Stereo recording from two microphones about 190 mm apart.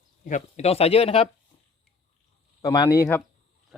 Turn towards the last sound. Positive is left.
turn(degrees=15)  # may be behind; listen again after turning